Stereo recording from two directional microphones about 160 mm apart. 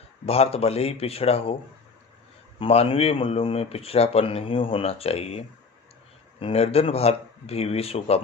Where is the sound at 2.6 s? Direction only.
35° left (ahead or behind).